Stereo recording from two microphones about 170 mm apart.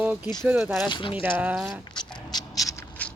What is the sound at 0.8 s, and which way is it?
Speech, 30° left (ahead or behind).